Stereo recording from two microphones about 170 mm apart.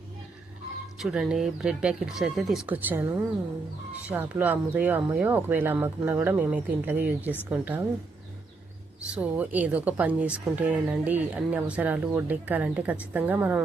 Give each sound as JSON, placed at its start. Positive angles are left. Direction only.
{"t": 0.9, "sound": "speech", "side_deg": 0}
{"t": 9.0, "sound": "speech", "side_deg": -10}